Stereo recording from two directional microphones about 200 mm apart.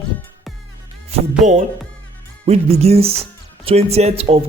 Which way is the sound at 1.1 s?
35° right (ahead or behind).